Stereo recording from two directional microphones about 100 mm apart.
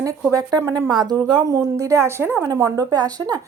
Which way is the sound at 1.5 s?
35° right (ahead or behind).